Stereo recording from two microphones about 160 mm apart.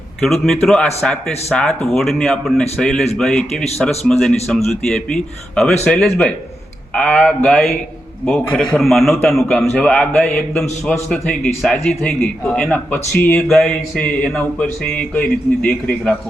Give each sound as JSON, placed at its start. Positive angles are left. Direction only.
{"t": 0.3, "sound": "a man's voice", "side_deg": 0}